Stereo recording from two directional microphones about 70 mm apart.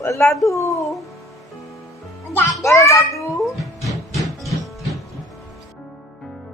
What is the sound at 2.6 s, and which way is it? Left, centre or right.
Speech, left.